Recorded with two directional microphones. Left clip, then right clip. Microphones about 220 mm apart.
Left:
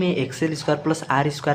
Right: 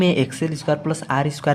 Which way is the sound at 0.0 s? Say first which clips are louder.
Right 4 dB; 35° right (ahead or behind).